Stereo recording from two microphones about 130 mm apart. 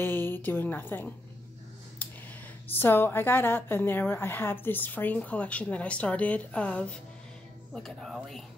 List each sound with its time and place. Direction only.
0.0 s a woman's voice: 15° left (ahead or behind)
2.7 s a woman's voice: 15° left (ahead or behind)